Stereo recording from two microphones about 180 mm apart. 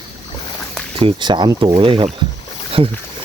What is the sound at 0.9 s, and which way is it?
Speech, 30° right (ahead or behind).